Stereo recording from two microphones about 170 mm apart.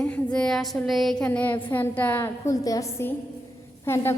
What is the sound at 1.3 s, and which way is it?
A woman's voice, 10° left (ahead or behind).